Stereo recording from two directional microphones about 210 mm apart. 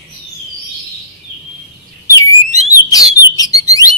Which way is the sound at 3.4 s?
15° left (ahead or behind).